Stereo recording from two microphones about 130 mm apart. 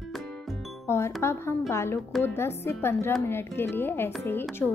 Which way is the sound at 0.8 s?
20° left (ahead or behind).